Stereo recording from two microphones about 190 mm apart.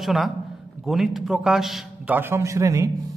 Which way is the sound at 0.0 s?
Centre (ahead or behind).